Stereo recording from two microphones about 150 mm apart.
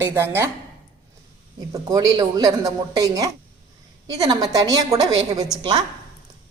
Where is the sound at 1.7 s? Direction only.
25° right (ahead or behind).